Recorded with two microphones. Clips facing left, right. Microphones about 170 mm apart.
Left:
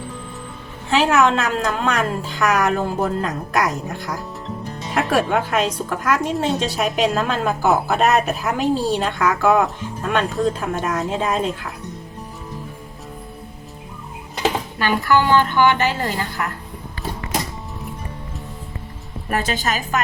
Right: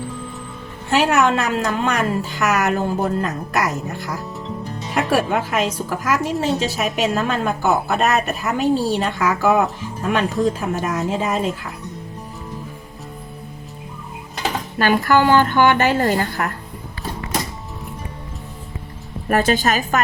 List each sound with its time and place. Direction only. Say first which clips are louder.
1.2 s a woman's voice: even; 5° right (ahead or behind)
14.8 s a woman's voice: right 3 dB; 45° right (ahead or behind)
19.3 s a woman's voice: right 5 dB; 50° right (ahead or behind)